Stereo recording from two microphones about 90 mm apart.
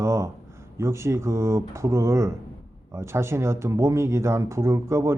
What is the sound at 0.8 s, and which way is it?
Speech, 30° right (ahead or behind).